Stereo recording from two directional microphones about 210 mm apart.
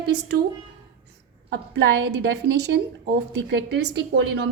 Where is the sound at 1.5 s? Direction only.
55° right (ahead or behind).